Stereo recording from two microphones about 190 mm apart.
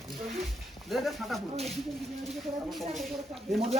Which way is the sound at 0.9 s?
Centre (ahead or behind).